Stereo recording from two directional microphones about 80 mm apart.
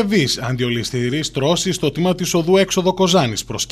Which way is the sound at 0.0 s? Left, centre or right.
Centre.